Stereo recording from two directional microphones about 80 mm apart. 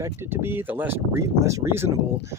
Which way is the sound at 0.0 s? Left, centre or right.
Right.